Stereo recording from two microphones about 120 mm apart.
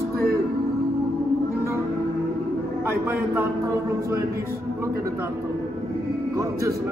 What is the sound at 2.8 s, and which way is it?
Speech, 20° right (ahead or behind).